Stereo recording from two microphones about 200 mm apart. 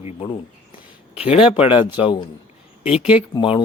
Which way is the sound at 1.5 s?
30° left (ahead or behind).